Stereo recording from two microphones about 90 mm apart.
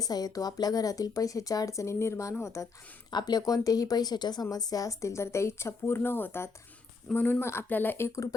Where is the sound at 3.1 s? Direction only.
50° left (ahead or behind); by 8.1 s 20° left (ahead or behind).